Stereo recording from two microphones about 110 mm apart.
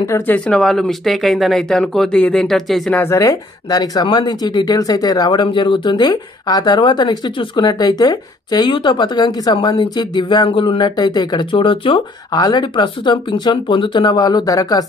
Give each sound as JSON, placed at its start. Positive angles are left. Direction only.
{"t": 0.3, "sound": "speech", "side_deg": 5}
{"t": 3.0, "sound": "speech", "side_deg": 25}
{"t": 12.3, "sound": "speech", "side_deg": 35}